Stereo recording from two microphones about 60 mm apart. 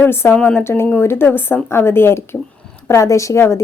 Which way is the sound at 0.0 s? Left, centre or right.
Left.